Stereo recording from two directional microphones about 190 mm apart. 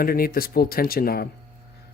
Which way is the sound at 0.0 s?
50° left (ahead or behind).